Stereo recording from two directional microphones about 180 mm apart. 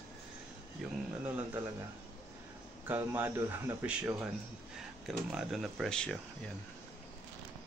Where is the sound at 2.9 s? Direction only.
10° right (ahead or behind); by 6.2 s 5° left (ahead or behind).